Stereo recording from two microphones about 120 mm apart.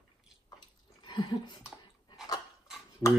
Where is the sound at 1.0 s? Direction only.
40° left (ahead or behind).